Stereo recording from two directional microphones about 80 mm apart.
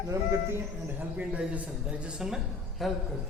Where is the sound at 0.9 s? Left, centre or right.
Centre.